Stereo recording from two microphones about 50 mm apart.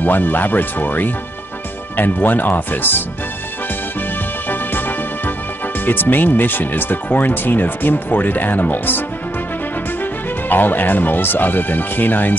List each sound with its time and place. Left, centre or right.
0.0 s speech: left
4.5 s music: left
5.9 s speech: left
10.5 s speech: left